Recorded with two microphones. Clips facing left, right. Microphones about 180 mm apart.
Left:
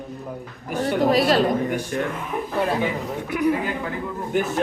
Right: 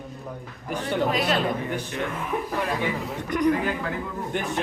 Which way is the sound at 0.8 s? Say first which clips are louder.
Left 6 dB; 40° left (ahead or behind).